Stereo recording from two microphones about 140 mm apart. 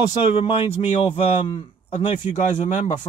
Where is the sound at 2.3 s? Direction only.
65° left (ahead or behind).